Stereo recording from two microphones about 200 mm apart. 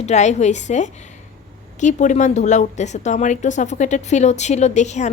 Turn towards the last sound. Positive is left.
turn(degrees=35)  # may be behind; listen again after turning